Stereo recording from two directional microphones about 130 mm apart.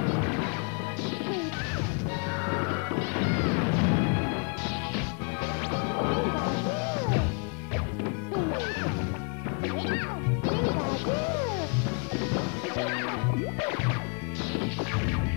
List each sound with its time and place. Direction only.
2.5 s smash: 30° left (ahead or behind)
5.7 s smash: 30° left (ahead or behind)
10.4 s music: 30° left (ahead or behind)